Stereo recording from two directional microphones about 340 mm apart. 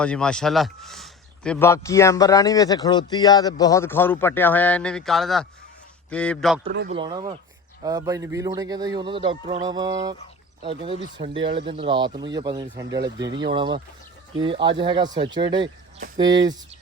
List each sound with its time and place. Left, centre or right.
0.0 s a man's voice: centre
6.7 s speech: centre
11.2 s speech: centre